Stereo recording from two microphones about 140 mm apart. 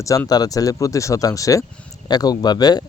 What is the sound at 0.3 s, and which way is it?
Speech, 25° left (ahead or behind).